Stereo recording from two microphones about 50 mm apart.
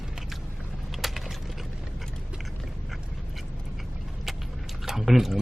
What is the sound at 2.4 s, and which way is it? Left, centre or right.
Dog, centre.